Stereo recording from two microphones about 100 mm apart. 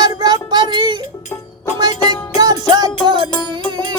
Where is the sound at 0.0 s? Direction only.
45° right (ahead or behind).